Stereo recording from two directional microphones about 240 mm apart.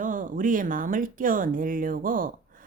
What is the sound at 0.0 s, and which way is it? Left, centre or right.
Speech, right.